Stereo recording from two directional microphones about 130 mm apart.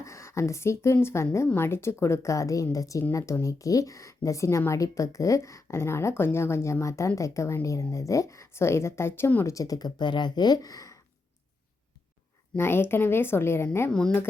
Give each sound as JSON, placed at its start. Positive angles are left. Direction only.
{"t": 0.0, "sound": "speech", "side_deg": 20}
{"t": 12.5, "sound": "a woman's voice", "side_deg": 20}
{"t": 13.9, "sound": "a woman's voice", "side_deg": 5}